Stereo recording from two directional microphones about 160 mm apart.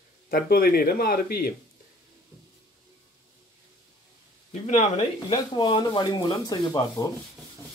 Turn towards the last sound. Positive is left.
turn(degrees=25)  # may be behind; listen again after turning